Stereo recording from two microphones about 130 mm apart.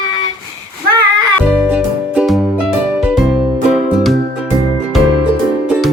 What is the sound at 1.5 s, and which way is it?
Music, 10° right (ahead or behind).